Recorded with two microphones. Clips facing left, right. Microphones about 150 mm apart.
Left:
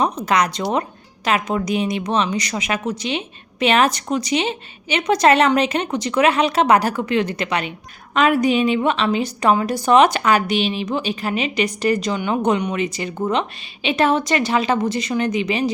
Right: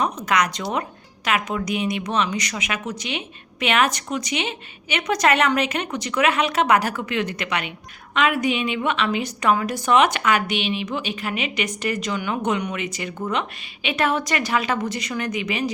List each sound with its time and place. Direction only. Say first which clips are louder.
0.0 s a woman's voice: left 3 dB; 30° left (ahead or behind)